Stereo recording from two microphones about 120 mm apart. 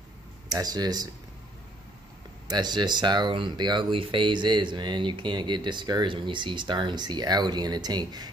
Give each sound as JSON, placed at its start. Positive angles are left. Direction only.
{"t": 0.5, "sound": "speech", "side_deg": -35}
{"t": 2.4, "sound": "speech", "side_deg": -35}